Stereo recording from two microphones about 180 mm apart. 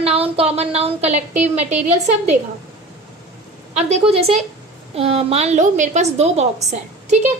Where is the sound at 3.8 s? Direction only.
40° right (ahead or behind).